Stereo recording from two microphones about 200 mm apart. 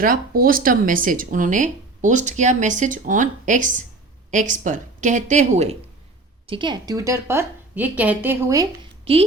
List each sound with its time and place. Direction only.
0.0 s speech: 45° right (ahead or behind)
6.5 s a woman's voice: 25° right (ahead or behind)